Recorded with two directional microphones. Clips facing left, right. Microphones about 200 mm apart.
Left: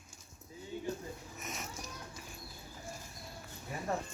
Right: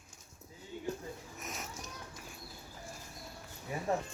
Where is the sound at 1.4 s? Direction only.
Centre (ahead or behind).